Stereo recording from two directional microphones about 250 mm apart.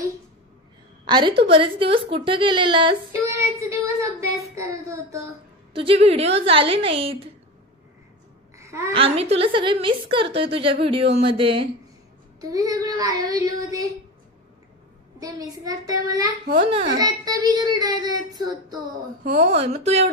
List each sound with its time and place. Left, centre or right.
1.0 s a woman's voice: centre
5.8 s a woman's voice: right
8.5 s babbling: centre
8.9 s a woman's voice: right
15.1 s a woman's voice: centre